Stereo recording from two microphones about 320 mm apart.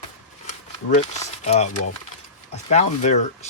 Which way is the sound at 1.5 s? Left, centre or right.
Left.